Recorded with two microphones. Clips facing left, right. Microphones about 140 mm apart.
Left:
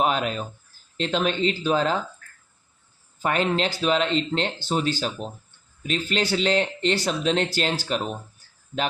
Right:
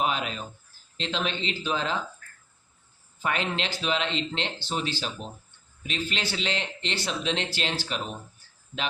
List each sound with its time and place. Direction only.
0.0 s speech: 45° left (ahead or behind)
3.2 s speech: 45° left (ahead or behind)